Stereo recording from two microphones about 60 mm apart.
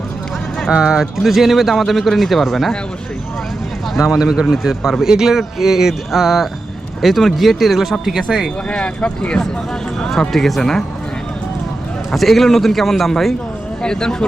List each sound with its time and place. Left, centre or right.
0.7 s speech: centre
3.9 s speech: centre
8.7 s speech: centre
10.0 s speech: centre
12.1 s speech: centre